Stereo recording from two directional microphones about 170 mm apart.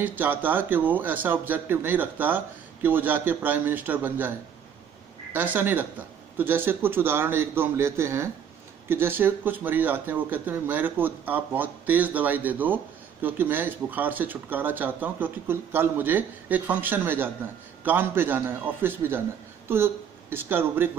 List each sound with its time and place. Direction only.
0.0 s speech: 10° right (ahead or behind)
5.3 s speech: 10° right (ahead or behind)